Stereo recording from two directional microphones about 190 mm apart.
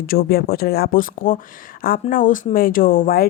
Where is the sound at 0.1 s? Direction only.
50° left (ahead or behind).